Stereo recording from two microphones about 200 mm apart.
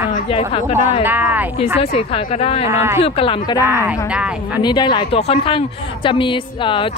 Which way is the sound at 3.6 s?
10° right (ahead or behind).